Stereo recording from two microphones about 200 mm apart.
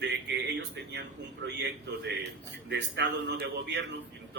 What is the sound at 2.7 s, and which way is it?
A man's voice, 55° right (ahead or behind).